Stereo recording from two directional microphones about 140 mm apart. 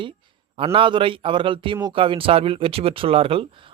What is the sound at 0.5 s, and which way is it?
Speech, 40° right (ahead or behind).